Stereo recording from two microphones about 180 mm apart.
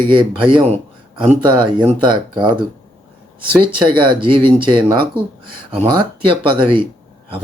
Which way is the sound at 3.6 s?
25° right (ahead or behind).